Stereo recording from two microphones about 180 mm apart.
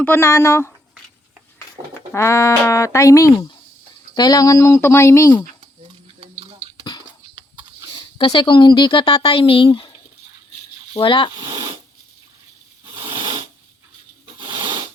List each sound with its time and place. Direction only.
0.0 s speech: 15° left (ahead or behind)
7.9 s speech: 25° left (ahead or behind)
10.9 s speech: 30° left (ahead or behind)
14.3 s a sound: 25° right (ahead or behind)